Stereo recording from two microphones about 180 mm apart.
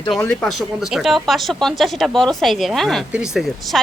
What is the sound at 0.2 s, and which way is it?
Speech, 10° left (ahead or behind).